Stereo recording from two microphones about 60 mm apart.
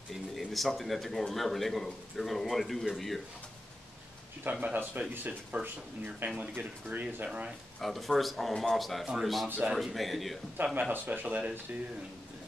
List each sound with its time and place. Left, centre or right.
0.1 s speech: centre
4.5 s speech: centre
4.7 s speech: right
7.8 s speech: centre
10.6 s speech: centre